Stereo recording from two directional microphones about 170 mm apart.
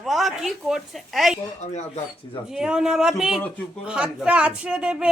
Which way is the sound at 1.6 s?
45° left (ahead or behind).